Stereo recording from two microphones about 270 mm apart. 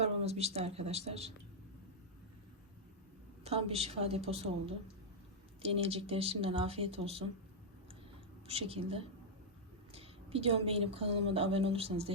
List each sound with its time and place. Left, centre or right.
0.0 s a woman's voice: right
3.4 s a woman's voice: right
8.4 s a woman's voice: right